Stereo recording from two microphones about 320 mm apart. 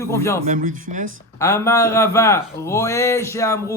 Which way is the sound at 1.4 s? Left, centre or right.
Centre.